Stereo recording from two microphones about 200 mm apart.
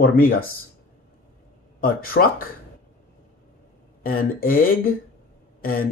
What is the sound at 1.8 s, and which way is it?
Speech, 45° left (ahead or behind).